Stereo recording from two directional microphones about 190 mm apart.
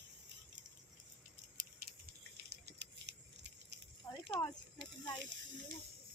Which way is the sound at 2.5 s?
60° right (ahead or behind).